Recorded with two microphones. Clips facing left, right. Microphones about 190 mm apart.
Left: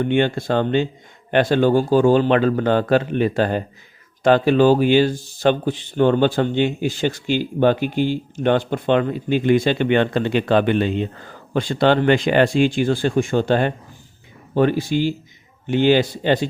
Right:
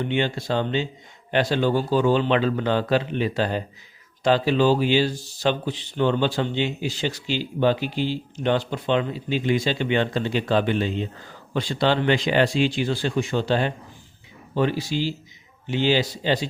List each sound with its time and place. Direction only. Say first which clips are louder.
0.0 s speech: left 6 dB; 50° left (ahead or behind)